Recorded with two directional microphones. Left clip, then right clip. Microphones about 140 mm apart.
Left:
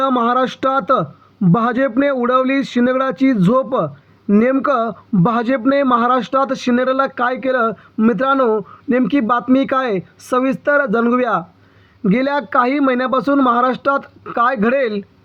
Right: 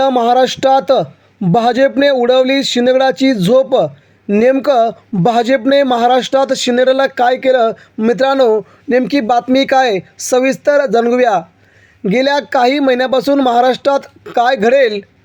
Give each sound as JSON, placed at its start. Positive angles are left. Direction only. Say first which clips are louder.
{"t": 0.0, "sound": "speech", "louder": "right 5 dB", "side_deg": -50}